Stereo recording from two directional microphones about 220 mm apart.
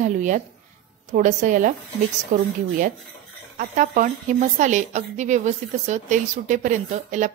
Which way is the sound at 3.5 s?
35° right (ahead or behind).